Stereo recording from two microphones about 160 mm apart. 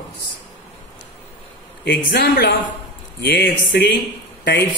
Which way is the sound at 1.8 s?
90° left.